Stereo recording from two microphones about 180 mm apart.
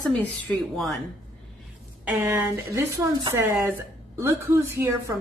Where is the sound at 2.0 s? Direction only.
10° right (ahead or behind).